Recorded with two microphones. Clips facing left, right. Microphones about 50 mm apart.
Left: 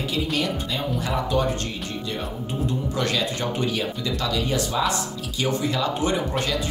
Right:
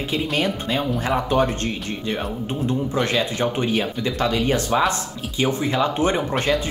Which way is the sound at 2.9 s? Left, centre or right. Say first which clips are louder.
Right 3 dB; right.